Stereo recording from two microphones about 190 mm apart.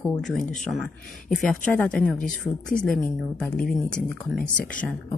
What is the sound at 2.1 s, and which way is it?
Speech, 45° left (ahead or behind).